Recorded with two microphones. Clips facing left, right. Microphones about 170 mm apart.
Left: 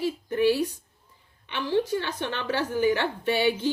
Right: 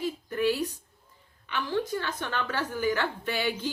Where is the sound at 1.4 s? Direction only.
20° left (ahead or behind).